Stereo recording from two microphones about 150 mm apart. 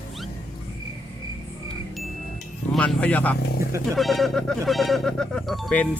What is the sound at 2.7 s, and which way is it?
Speech, 5° left (ahead or behind).